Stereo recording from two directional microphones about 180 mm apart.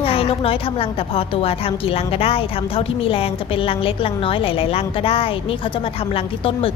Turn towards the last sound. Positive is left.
turn(degrees=30)  # may be behind; listen again after turning